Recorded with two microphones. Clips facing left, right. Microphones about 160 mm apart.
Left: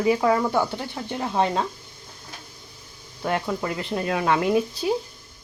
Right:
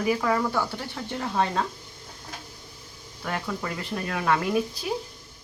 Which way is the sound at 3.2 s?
25° left (ahead or behind).